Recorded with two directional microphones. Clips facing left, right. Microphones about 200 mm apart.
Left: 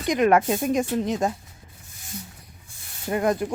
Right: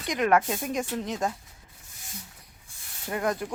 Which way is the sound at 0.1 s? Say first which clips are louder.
Left 5 dB; 25° left (ahead or behind).